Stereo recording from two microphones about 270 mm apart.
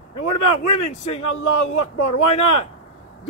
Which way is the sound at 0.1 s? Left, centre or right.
Left.